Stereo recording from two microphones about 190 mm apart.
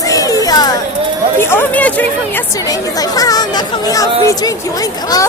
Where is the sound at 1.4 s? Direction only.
10° left (ahead or behind).